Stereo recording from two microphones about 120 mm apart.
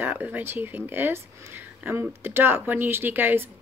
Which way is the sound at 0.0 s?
15° right (ahead or behind).